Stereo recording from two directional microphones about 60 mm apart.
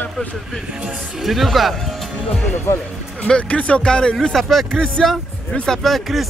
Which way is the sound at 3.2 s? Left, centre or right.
Centre.